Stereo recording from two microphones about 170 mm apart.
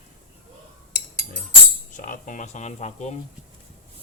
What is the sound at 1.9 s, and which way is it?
Speech, 50° left (ahead or behind).